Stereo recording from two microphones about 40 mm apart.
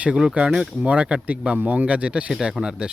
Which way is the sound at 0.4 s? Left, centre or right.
Right.